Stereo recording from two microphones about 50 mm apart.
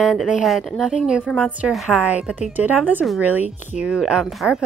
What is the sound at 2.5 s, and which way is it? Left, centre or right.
Speech, right.